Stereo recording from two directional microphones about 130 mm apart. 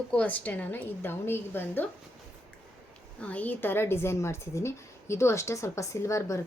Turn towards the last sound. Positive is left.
turn(degrees=25)  # may be behind; listen again after turning